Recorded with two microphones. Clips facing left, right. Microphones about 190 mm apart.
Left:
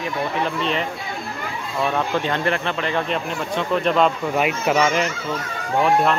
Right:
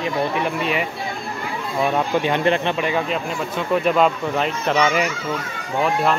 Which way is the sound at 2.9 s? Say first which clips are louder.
Right 1 dB; 5° right (ahead or behind).